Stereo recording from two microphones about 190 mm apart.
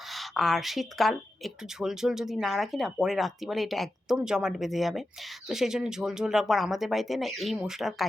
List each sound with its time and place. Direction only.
0.1 s speech: centre (ahead or behind)